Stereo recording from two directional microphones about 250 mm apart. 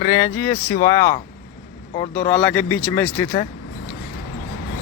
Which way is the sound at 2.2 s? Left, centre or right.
Centre.